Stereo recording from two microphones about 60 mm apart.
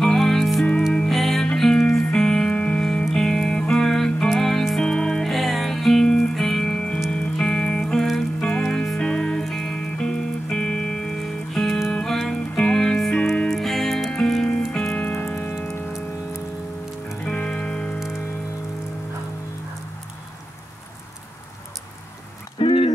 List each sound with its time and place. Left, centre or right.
0.0 s music: centre
5.3 s music: centre
13.5 s music: centre
14.3 s music: centre
15.1 s music: left
17.2 s music: left